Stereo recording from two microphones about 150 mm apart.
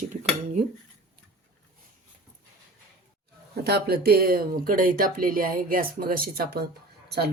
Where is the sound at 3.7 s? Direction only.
90° right.